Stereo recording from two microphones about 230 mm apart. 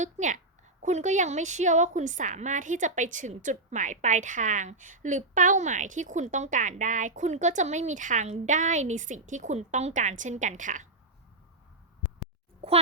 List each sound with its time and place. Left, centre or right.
0.0 s a woman's voice: right